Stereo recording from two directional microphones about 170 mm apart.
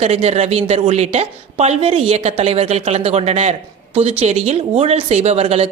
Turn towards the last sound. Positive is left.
turn(degrees=-35)  # may be behind; listen again after turning